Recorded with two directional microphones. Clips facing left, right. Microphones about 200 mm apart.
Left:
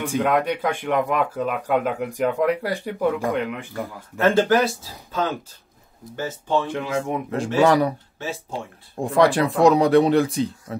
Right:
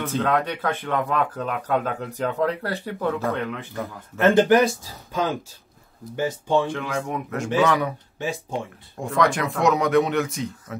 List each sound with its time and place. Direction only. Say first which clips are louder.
0.0 s speech: left 2 dB; 10° left (ahead or behind)
4.2 s speech: right 1 dB; 15° right (ahead or behind)
6.1 s speech: right 2 dB; 15° right (ahead or behind)
6.7 s speech: left 3 dB; 15° left (ahead or behind)
7.6 s speech: left 8 dB; 35° left (ahead or behind)